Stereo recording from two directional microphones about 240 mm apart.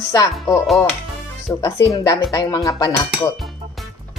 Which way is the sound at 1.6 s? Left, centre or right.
Centre.